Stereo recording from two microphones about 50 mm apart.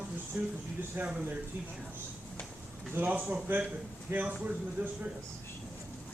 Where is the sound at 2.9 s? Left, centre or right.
Right.